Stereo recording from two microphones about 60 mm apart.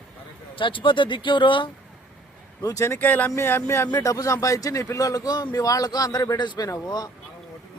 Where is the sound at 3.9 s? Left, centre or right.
Left.